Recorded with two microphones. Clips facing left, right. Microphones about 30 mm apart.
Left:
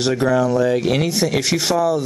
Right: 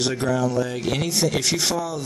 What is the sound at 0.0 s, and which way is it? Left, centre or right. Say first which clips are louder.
Speech: left 5 dB; centre.